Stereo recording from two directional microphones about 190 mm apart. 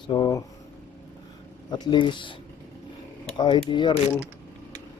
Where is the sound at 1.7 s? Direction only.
25° left (ahead or behind).